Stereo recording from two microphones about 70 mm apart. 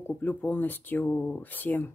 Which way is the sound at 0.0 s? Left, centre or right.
Left.